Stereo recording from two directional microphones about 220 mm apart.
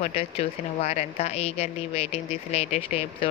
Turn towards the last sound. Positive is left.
turn(degrees=30)  # may be behind; listen again after turning